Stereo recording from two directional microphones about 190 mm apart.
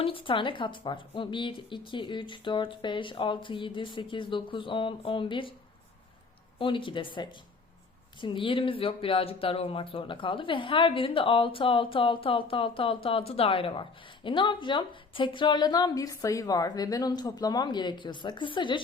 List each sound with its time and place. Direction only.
0.0 s speech: 30° left (ahead or behind)
6.6 s speech: 25° left (ahead or behind)